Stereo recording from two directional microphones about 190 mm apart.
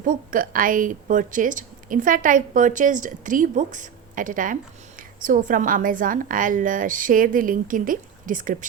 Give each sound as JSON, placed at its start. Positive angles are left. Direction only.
{"t": 0.1, "sound": "a woman's voice", "side_deg": -45}